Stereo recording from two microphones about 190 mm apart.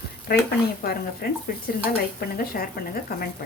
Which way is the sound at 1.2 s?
50° left (ahead or behind).